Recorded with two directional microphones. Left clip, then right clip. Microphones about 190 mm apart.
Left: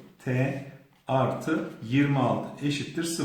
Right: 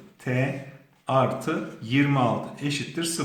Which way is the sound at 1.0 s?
25° right (ahead or behind).